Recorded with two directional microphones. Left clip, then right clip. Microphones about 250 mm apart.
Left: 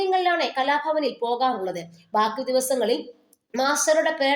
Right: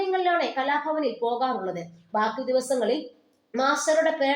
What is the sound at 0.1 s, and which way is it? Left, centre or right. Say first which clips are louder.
A woman's voice: left 2 dB; left.